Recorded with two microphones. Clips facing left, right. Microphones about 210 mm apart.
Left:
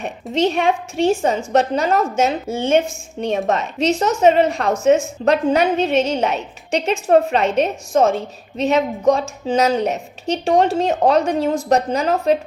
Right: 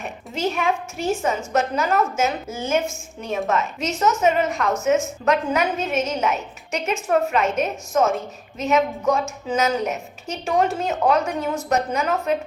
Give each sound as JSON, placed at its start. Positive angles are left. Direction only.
{"t": 0.4, "sound": "a woman's voice", "side_deg": 30}